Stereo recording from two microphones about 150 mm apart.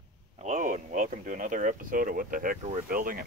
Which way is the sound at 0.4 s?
55° right (ahead or behind).